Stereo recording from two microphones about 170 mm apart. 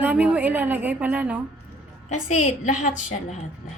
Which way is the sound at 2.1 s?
45° left (ahead or behind).